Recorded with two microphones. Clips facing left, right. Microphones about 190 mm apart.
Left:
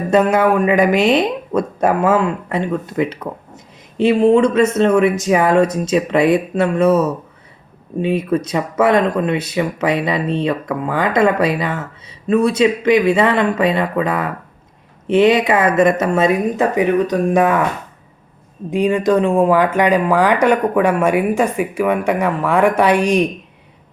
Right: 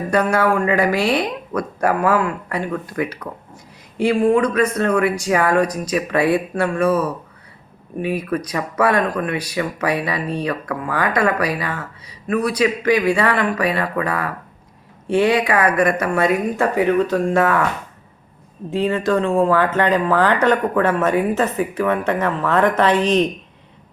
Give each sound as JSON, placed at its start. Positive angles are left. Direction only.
{"t": 0.1, "sound": "speech", "side_deg": 20}
{"t": 18.7, "sound": "speech", "side_deg": 15}